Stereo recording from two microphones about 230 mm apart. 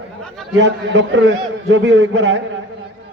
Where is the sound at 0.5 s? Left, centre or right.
Right.